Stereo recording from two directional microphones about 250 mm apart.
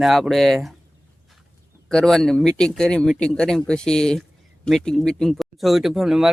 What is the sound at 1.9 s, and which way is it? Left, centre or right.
Speech, centre.